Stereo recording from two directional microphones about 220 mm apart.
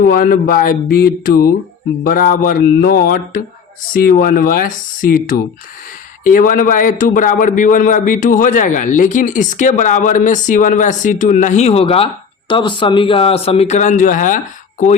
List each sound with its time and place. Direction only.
0.0 s a man's voice: 40° left (ahead or behind)